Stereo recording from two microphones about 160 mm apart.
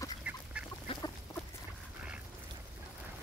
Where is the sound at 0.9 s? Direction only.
35° left (ahead or behind).